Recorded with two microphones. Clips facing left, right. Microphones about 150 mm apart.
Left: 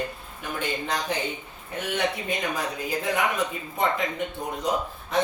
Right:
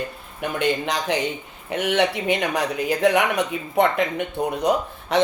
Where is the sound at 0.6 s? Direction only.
80° right.